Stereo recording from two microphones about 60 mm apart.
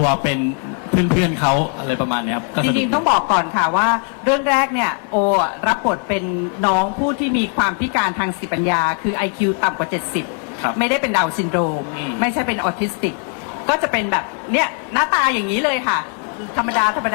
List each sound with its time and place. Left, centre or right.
0.0 s a man's voice: left